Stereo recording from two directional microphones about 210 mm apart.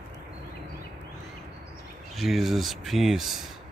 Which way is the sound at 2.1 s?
Centre (ahead or behind).